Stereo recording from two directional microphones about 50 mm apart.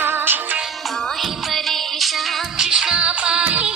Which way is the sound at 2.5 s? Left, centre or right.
Centre.